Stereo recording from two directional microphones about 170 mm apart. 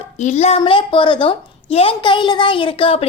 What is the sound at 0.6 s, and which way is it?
Speech, 30° left (ahead or behind).